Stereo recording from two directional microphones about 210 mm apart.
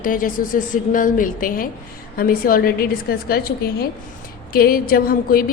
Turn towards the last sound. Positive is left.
turn(degrees=45)  # may be behind; listen again after turning